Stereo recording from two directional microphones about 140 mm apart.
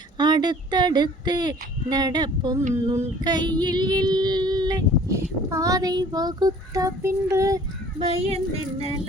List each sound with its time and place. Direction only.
0.2 s female singing: 30° right (ahead or behind)
7.9 s speech: 40° right (ahead or behind)